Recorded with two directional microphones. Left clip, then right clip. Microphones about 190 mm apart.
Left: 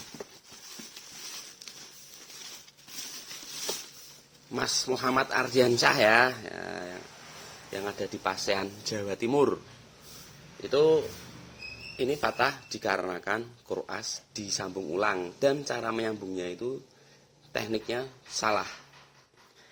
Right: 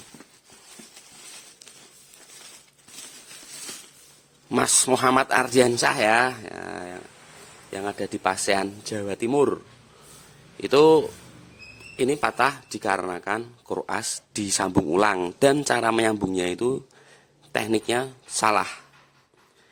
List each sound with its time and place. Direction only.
4.5 s speech: 40° right (ahead or behind); by 9.6 s 20° right (ahead or behind)
10.6 s speech: 45° right (ahead or behind)